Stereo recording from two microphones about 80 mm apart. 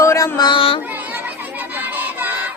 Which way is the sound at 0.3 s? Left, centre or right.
Left.